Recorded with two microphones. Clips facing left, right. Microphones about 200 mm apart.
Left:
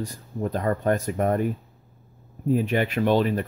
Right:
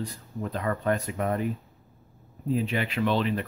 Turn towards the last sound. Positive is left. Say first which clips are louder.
# left 4 dB
turn(degrees=45)  # may be behind; listen again after turning